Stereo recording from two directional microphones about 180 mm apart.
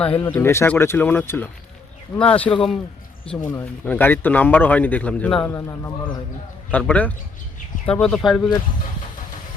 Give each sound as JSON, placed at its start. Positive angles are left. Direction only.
{"t": 0.0, "sound": "a man's voice", "side_deg": 5}
{"t": 5.5, "sound": "a man's voice", "side_deg": 15}